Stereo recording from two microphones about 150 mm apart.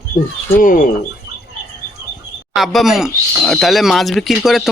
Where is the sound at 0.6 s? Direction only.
65° left (ahead or behind).